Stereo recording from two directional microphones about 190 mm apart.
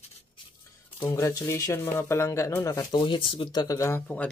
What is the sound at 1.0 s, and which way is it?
Speech, 20° left (ahead or behind).